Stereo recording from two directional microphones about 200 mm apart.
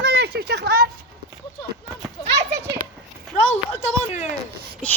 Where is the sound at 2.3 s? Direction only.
60° right (ahead or behind).